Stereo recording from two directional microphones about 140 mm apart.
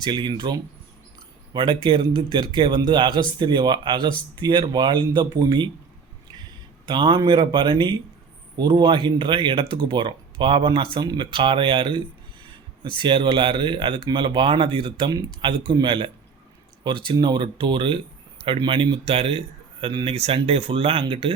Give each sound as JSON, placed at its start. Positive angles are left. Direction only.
{"t": 0.0, "sound": "speech", "side_deg": -35}
{"t": 6.8, "sound": "speech", "side_deg": -35}
{"t": 17.1, "sound": "speech", "side_deg": -35}